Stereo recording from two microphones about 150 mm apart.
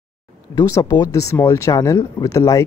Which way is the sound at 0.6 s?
25° left (ahead or behind).